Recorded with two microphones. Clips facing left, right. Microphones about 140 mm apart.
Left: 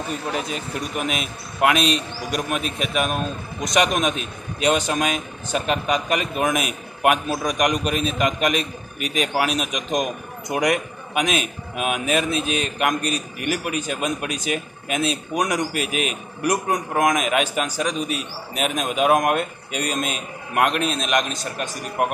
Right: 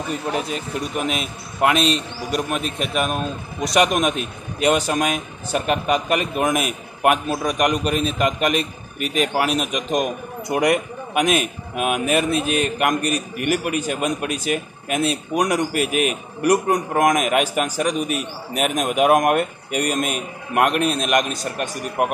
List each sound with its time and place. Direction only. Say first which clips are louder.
0.5 s a man's voice: right 2 dB; centre (ahead or behind)
13.1 s speech: right 4 dB; 55° right (ahead or behind)
13.7 s a man's voice: right 3 dB; 10° right (ahead or behind)
15.7 s a man's voice: right 4 dB; 50° right (ahead or behind)
16.9 s a man's voice: right 2 dB; 5° right (ahead or behind)
18.1 s speech: right 3 dB; 55° right (ahead or behind)
18.8 s a man's voice: right 2 dB; 10° right (ahead or behind)